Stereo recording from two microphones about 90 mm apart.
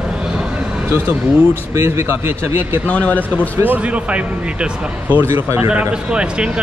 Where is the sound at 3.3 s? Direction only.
20° right (ahead or behind).